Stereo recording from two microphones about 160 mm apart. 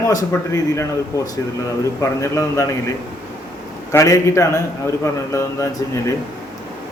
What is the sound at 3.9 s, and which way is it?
A man's voice, 20° left (ahead or behind).